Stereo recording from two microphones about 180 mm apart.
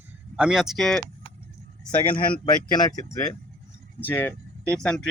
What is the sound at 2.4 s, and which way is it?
Speech, 20° left (ahead or behind).